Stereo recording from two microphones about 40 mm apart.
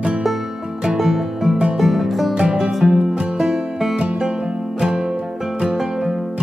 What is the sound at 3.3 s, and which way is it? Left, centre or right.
Music, centre.